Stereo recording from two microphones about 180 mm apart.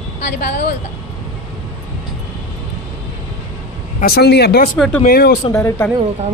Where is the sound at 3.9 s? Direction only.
55° left (ahead or behind).